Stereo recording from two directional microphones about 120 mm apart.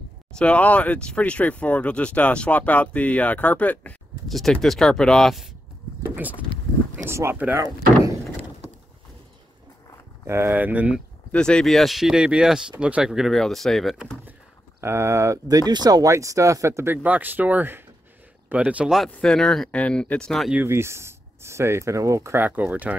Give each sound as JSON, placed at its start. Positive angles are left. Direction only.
{"t": 0.3, "sound": "speech", "side_deg": 10}
{"t": 6.0, "sound": "vehicle", "side_deg": -15}
{"t": 7.1, "sound": "speech", "side_deg": -20}
{"t": 7.6, "sound": "speech", "side_deg": -30}
{"t": 10.2, "sound": "speech", "side_deg": -20}
{"t": 11.3, "sound": "speech", "side_deg": 5}
{"t": 14.8, "sound": "speech", "side_deg": -20}
{"t": 19.0, "sound": "speech", "side_deg": 10}
{"t": 20.5, "sound": "speech", "side_deg": -20}